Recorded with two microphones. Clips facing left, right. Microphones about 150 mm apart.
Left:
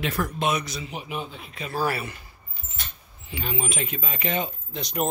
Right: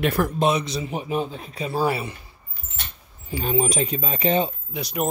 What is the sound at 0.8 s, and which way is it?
Speech, 40° right (ahead or behind).